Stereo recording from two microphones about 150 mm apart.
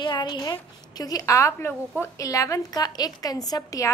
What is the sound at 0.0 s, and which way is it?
A woman's voice, 30° left (ahead or behind).